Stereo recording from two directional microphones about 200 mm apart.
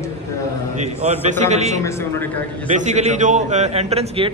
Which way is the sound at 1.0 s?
35° right (ahead or behind).